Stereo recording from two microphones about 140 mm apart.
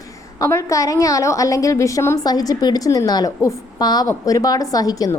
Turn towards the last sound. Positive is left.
turn(degrees=25)  # may be behind; listen again after turning